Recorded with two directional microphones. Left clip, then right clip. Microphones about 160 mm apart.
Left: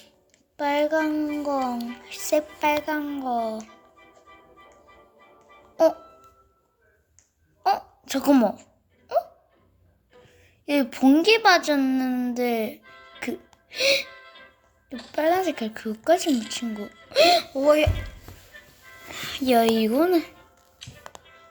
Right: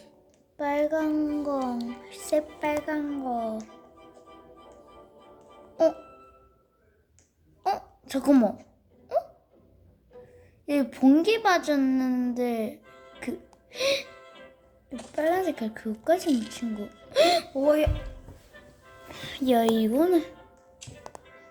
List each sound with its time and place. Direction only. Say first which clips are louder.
0.5 s a child's voice: left 3 dB; 5° left (ahead or behind)
7.6 s a sound: left 5 dB; 5° left (ahead or behind)
9.1 s hiccup: left 3 dB; centre (ahead or behind)
10.7 s a woman's voice: left 2 dB; 5° left (ahead or behind)
12.8 s music: left 3 dB; 35° right (ahead or behind)
13.1 s music: left 4 dB; 5° left (ahead or behind)
14.1 s music: left 2 dB; 35° right (ahead or behind)
15.1 s a woman's voice: left 3 dB; 10° left (ahead or behind)
16.8 s music: left 2 dB; 30° right (ahead or behind)
17.1 s speech: left 4 dB; centre (ahead or behind)
17.7 s a woman's voice: left 4 dB; 15° left (ahead or behind)
19.0 s music: left 2 dB; 10° left (ahead or behind)
19.8 s a woman's voice: left 2 dB; 10° left (ahead or behind)
20.7 s music: left 2 dB; 45° right (ahead or behind)